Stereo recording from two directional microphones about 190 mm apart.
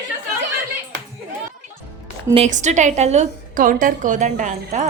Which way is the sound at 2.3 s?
35° right (ahead or behind).